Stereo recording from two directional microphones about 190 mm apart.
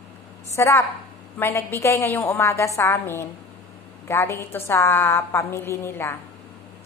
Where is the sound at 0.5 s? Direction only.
15° left (ahead or behind).